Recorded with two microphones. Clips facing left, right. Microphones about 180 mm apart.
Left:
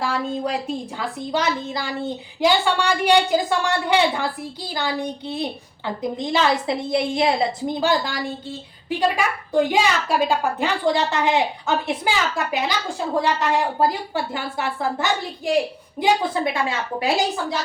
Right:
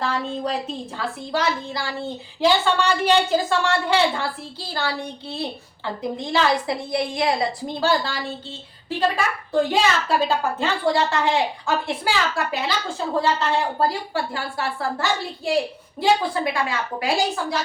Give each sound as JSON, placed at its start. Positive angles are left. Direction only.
{"t": 0.0, "sound": "a woman's voice", "side_deg": 10}